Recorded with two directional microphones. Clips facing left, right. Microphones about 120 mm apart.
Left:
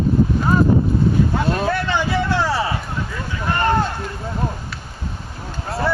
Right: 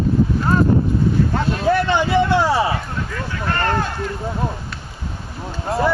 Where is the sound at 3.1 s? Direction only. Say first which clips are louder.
Even; 15° left (ahead or behind).